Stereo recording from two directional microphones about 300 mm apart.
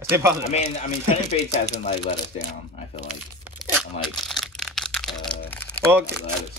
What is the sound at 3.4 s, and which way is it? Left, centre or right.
Tearing, centre.